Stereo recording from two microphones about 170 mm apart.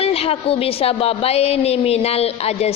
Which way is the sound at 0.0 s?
35° left (ahead or behind).